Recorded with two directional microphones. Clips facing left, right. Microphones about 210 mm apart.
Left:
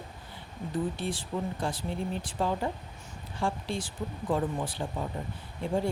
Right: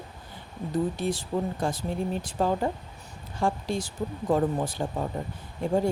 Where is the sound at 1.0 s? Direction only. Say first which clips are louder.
Right 5 dB; 40° right (ahead or behind).